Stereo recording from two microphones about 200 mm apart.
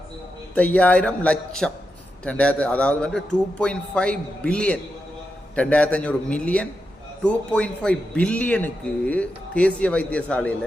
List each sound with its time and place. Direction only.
0.5 s a man's voice: 5° left (ahead or behind)